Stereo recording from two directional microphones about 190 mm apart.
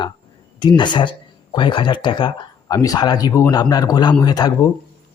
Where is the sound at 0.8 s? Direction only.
25° left (ahead or behind).